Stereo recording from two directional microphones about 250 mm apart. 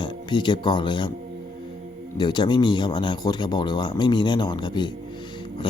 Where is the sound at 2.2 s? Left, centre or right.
Centre.